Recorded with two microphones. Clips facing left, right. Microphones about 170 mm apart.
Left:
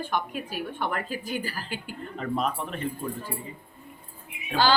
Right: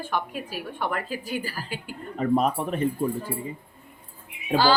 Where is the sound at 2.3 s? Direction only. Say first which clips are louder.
Right 6 dB; 45° right (ahead or behind).